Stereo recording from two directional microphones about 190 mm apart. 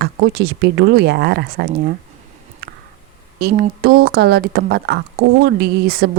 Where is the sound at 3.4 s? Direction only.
55° right (ahead or behind).